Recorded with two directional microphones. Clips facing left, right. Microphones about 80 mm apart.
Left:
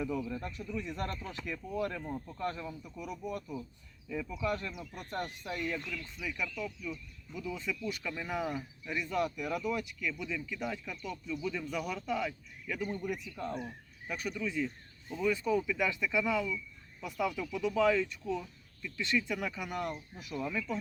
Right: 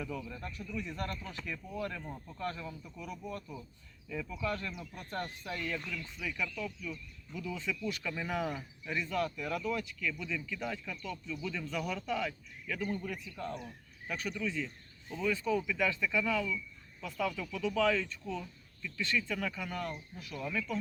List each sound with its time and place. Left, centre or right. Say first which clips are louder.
0.0 s speech: left 5 dB; left
2.0 s speech: left 5 dB; centre
2.4 s speech: even; left; by 9.0 s centre
9.0 s speech: left 3 dB; centre
13.5 s speech: left 3 dB; left
14.1 s speech: even; centre